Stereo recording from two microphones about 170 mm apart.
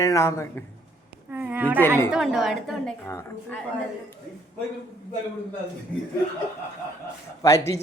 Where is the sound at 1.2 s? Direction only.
10° right (ahead or behind).